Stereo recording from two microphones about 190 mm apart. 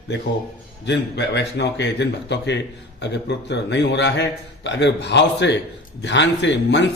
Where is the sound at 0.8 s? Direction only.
65° left (ahead or behind).